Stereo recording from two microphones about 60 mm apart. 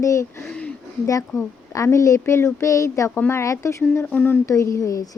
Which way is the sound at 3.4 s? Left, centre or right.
Left.